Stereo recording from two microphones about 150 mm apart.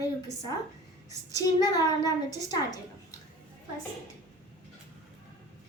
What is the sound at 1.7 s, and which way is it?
A woman's voice, 25° left (ahead or behind).